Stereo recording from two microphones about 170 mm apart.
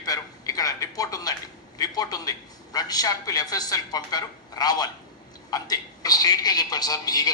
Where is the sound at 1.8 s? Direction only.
20° left (ahead or behind).